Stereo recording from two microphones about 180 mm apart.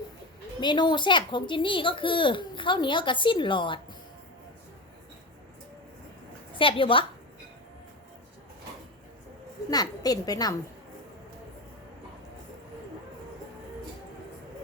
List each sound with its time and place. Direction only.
0.6 s speech: 25° left (ahead or behind)
6.6 s speech: 30° left (ahead or behind)
9.6 s speech: 20° left (ahead or behind)